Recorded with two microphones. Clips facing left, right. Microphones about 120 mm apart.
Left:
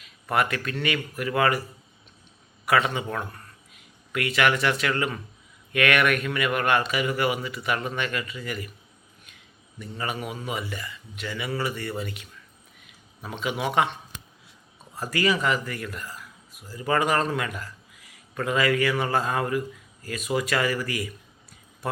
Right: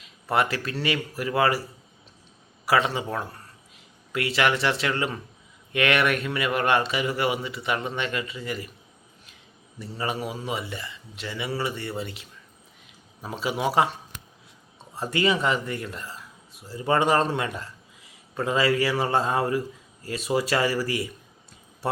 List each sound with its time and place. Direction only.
0.0 s a man's voice: 25° right (ahead or behind)
2.6 s a man's voice: 30° right (ahead or behind)
9.7 s a man's voice: 30° right (ahead or behind)
14.9 s speech: 25° right (ahead or behind)